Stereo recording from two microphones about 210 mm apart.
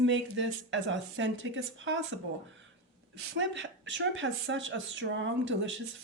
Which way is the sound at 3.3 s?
60° right (ahead or behind).